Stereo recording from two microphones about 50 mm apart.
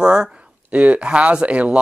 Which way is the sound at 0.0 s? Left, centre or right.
Centre.